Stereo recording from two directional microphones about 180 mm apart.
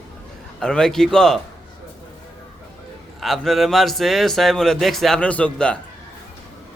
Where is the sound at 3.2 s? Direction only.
Centre (ahead or behind).